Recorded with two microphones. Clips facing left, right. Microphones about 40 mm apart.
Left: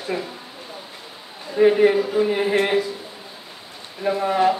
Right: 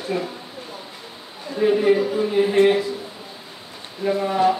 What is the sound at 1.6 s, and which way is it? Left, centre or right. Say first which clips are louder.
Speech: left 2 dB; left.